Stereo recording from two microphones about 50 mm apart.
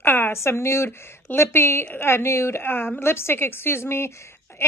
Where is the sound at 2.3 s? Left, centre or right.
Left.